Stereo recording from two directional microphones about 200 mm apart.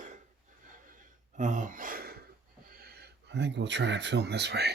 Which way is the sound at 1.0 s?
40° right (ahead or behind).